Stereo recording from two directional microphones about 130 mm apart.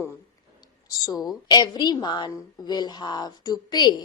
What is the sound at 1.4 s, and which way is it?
A woman's voice, 35° left (ahead or behind).